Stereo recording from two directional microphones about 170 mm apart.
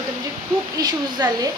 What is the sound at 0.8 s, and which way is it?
Speech, 20° right (ahead or behind).